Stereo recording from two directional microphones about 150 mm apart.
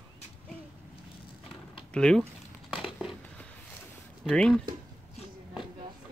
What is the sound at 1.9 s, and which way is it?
Speech, 5° left (ahead or behind).